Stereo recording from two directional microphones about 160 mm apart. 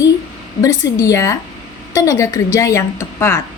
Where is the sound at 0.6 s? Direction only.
20° left (ahead or behind).